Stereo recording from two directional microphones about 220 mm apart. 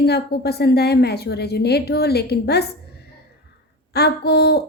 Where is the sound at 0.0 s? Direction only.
45° left (ahead or behind).